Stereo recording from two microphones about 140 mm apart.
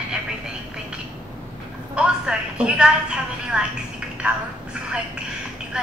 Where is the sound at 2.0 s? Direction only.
5° right (ahead or behind).